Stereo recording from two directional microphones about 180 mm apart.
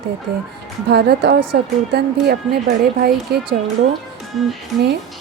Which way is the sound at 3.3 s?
65° right (ahead or behind).